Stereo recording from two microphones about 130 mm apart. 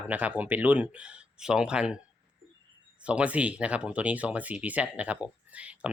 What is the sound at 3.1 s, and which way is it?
Speech, 10° right (ahead or behind).